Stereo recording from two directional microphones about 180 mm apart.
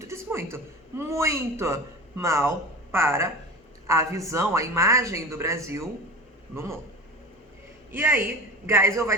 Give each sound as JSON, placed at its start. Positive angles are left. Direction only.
{"t": 0.1, "sound": "a man's voice", "side_deg": -15}
{"t": 7.9, "sound": "speech", "side_deg": -10}